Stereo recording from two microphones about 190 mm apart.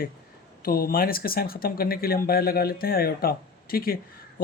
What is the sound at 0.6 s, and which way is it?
Speech, 50° left (ahead or behind).